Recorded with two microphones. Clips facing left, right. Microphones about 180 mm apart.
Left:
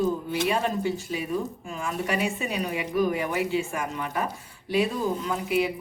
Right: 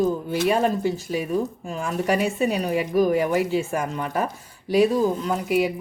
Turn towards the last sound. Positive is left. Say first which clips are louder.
# right 4 dB
turn(degrees=-40)  # may be behind; listen again after turning